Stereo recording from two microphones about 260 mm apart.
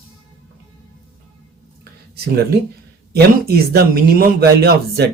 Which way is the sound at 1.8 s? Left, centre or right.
Right.